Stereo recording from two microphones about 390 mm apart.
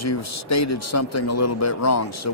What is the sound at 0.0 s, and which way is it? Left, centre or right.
Speech, left.